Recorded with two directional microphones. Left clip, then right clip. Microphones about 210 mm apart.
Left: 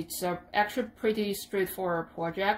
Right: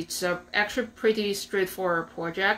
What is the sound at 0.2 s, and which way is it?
Speech, 40° left (ahead or behind).